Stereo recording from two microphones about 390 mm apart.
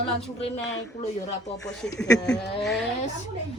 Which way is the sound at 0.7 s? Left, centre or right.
Left.